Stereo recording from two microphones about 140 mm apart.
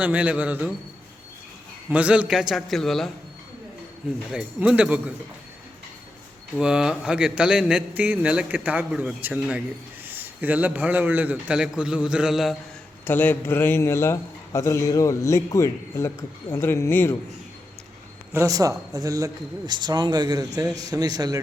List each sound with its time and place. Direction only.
0.0 s a man's voice: 10° right (ahead or behind)
1.9 s a man's voice: 10° right (ahead or behind)
4.3 s a man's voice: 5° right (ahead or behind)
6.6 s a man's voice: 5° right (ahead or behind)
13.1 s a man's voice: 15° left (ahead or behind)
18.3 s speech: 25° right (ahead or behind)